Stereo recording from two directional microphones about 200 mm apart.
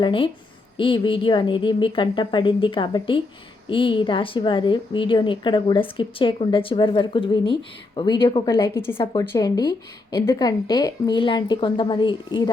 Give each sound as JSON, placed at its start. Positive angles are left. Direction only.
{"t": 0.0, "sound": "a woman's voice", "side_deg": 25}